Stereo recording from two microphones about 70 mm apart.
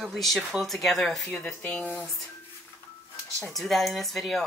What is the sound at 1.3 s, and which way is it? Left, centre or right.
Speech, centre.